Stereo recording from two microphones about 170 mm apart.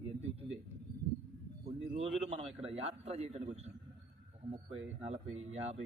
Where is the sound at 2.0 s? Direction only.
35° right (ahead or behind).